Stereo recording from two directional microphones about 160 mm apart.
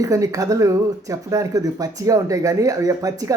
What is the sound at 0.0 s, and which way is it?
Speech, 20° right (ahead or behind).